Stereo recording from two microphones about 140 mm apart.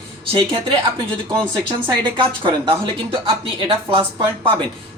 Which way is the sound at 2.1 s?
35° right (ahead or behind).